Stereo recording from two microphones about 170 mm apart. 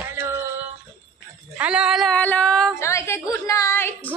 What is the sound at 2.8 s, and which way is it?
A woman's voice, 15° left (ahead or behind).